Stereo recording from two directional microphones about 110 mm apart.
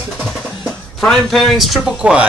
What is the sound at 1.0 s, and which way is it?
A man's voice, 5° left (ahead or behind).